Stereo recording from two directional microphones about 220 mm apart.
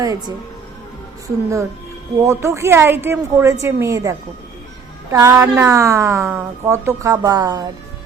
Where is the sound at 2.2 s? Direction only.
10° right (ahead or behind).